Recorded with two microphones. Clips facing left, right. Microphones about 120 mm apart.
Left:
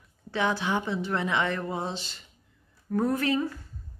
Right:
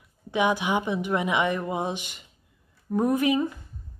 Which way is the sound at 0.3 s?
15° right (ahead or behind).